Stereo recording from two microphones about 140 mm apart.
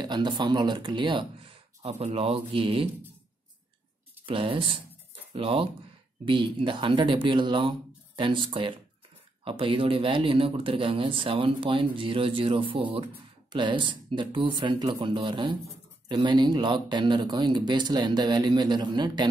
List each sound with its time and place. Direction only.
0.0 s speech: 30° right (ahead or behind)
1.8 s speech: 50° right (ahead or behind)
4.3 s speech: 40° right (ahead or behind)